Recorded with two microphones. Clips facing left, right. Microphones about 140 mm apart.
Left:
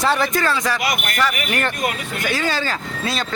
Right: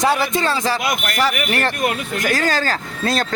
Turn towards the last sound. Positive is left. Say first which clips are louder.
# right 4 dB
turn(degrees=-45)  # may be behind; listen again after turning